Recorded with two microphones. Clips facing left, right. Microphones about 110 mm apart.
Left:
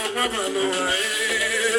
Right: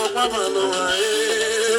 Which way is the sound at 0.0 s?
30° right (ahead or behind).